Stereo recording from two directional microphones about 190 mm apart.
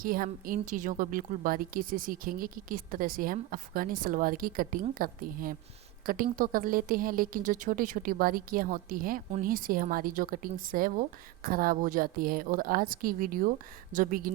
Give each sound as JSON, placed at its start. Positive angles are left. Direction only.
{"t": 0.0, "sound": "a woman's voice", "side_deg": -50}